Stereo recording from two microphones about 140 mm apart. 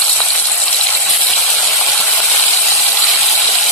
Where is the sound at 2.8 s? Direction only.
Centre (ahead or behind).